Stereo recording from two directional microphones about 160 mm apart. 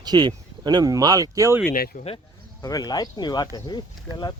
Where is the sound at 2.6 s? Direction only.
25° left (ahead or behind).